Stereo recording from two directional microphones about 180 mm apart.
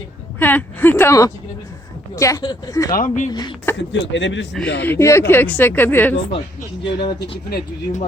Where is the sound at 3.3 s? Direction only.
25° left (ahead or behind).